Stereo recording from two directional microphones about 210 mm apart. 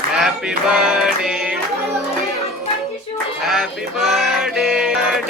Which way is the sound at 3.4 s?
Centre (ahead or behind).